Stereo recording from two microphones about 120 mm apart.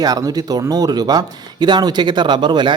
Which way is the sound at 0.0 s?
30° right (ahead or behind).